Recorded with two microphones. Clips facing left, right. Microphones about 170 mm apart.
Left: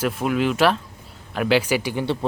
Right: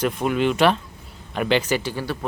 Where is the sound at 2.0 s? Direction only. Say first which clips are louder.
Left 4 dB; 25° left (ahead or behind).